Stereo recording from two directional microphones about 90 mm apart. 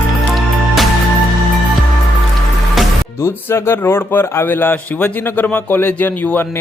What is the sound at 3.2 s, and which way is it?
Speech, 30° left (ahead or behind).